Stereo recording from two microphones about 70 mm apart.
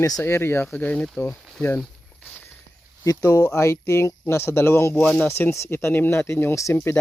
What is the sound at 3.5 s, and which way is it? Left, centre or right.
Speech, left.